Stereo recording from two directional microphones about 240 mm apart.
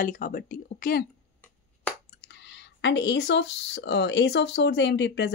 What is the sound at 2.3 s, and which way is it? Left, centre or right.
Speech, left.